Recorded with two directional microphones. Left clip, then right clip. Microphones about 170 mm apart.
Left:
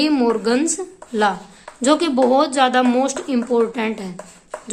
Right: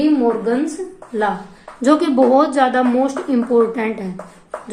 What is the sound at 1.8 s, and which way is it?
A woman's voice, 25° left (ahead or behind).